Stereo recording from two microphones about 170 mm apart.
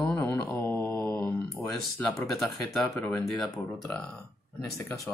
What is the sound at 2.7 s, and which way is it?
Speech, 10° left (ahead or behind).